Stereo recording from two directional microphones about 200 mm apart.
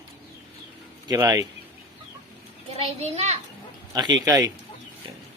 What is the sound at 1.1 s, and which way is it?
Speech, 15° right (ahead or behind).